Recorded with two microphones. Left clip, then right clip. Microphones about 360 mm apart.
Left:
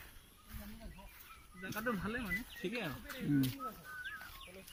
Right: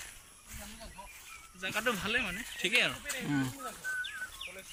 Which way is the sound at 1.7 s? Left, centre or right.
Centre.